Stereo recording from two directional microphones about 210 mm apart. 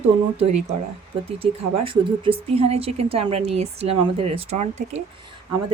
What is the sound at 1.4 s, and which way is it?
Speech, 25° right (ahead or behind).